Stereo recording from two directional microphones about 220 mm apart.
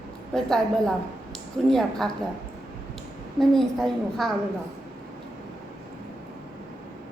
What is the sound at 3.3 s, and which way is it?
A woman's voice, centre (ahead or behind).